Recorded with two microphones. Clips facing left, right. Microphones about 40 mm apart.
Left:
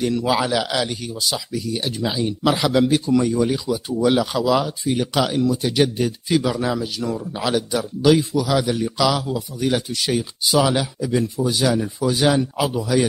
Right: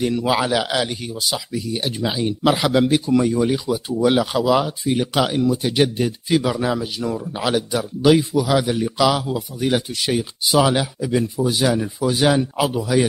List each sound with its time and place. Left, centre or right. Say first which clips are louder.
0.0 s a man's voice: right 1 dB; centre